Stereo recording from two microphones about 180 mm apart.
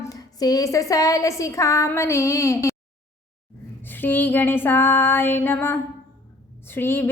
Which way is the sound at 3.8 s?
10° left (ahead or behind).